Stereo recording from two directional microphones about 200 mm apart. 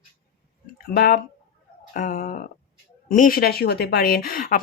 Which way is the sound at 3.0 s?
45° left (ahead or behind).